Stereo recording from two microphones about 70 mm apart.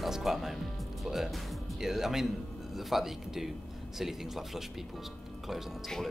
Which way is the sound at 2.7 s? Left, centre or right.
Centre.